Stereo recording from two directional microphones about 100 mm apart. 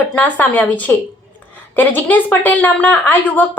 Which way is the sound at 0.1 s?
15° left (ahead or behind).